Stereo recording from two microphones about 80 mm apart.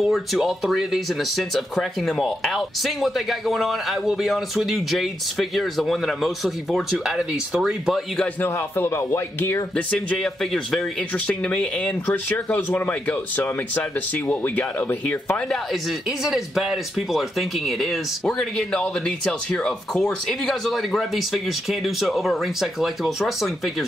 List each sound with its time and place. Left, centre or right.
0.0 s speech: centre
8.4 s speech: left
10.1 s speech: centre; by 15.3 s left
15.3 s speech: centre
16.1 s speech: centre